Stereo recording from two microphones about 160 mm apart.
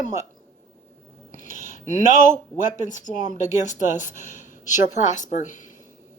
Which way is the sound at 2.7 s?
50° left (ahead or behind).